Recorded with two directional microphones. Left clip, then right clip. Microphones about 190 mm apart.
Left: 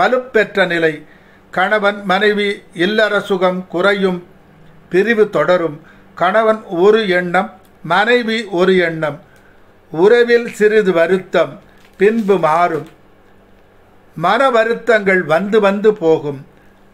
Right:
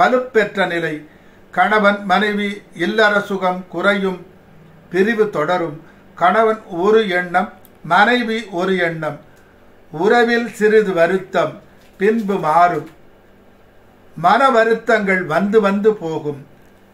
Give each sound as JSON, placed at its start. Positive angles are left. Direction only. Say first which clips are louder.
{"t": 0.0, "sound": "a man's voice", "louder": "left 1 dB", "side_deg": 55}
{"t": 14.2, "sound": "speech", "louder": "even", "side_deg": 55}